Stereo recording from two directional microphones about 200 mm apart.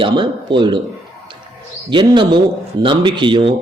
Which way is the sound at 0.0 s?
25° right (ahead or behind).